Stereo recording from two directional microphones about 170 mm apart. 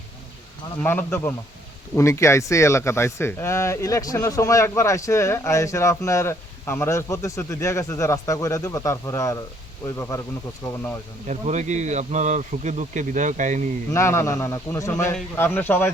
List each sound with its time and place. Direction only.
0.8 s a man's voice: 10° left (ahead or behind)
11.3 s speech: 45° right (ahead or behind)
13.9 s speech: 15° left (ahead or behind)